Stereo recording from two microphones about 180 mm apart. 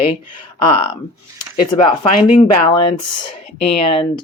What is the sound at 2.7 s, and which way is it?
Speech, 25° left (ahead or behind).